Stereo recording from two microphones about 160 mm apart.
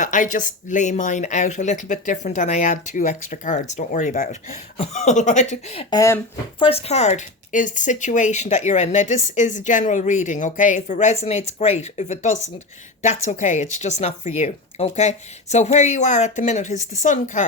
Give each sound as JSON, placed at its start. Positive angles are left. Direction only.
{"t": 0.0, "sound": "speech", "side_deg": 50}
{"t": 5.9, "sound": "speech", "side_deg": 20}
{"t": 6.6, "sound": "speech", "side_deg": 40}